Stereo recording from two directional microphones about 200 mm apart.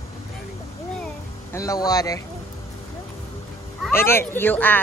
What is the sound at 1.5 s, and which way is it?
Speech, 20° left (ahead or behind).